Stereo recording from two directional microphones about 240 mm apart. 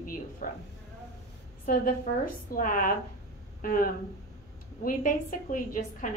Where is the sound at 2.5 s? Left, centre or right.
Left.